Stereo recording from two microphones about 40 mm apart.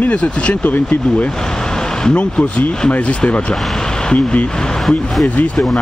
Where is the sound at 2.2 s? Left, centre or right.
Left.